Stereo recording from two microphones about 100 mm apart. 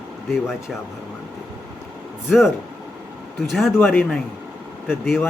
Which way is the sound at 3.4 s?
Centre (ahead or behind).